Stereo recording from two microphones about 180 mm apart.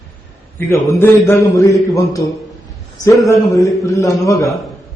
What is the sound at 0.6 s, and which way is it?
A man's voice, 10° left (ahead or behind).